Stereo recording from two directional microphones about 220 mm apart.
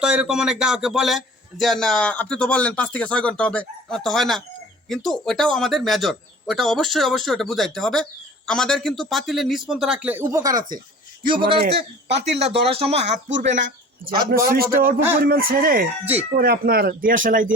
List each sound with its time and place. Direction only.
0.0 s a man's voice: 5° right (ahead or behind); by 11.6 s 20° right (ahead or behind)
11.6 s speech: 50° right (ahead or behind)
12.4 s speech: 25° right (ahead or behind)